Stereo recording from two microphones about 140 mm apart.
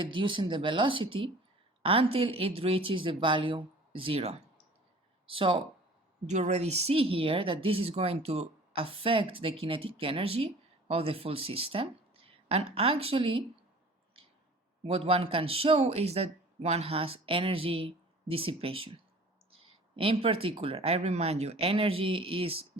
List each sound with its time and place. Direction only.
0.0 s speech: 35° right (ahead or behind)
6.2 s speech: 55° right (ahead or behind)
14.8 s speech: 45° right (ahead or behind)